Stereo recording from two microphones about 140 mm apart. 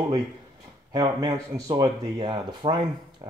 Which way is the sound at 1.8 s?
30° right (ahead or behind).